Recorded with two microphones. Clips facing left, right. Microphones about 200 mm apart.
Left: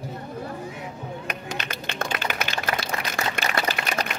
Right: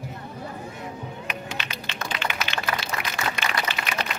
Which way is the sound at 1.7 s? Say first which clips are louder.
Left 4 dB; 50° left (ahead or behind).